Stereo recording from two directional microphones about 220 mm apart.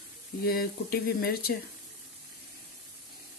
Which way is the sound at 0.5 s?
45° left (ahead or behind).